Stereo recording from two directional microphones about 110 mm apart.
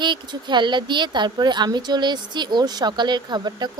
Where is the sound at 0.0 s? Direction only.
45° right (ahead or behind).